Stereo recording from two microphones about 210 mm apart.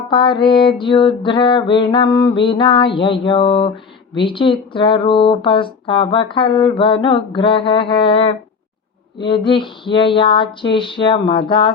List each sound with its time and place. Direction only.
0.1 s speech: 20° left (ahead or behind)